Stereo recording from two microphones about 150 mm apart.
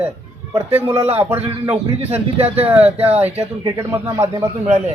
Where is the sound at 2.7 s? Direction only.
10° right (ahead or behind).